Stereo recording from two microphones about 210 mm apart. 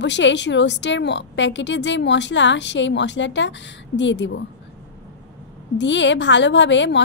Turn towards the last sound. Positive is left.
turn(degrees=60)  # may be behind; listen again after turning